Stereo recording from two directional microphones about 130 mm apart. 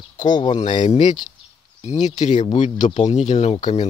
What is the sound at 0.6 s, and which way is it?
Speech, 70° left (ahead or behind).